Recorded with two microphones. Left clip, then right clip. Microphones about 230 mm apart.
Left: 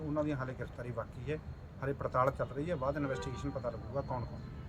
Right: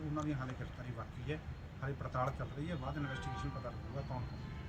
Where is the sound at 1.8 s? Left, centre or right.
Left.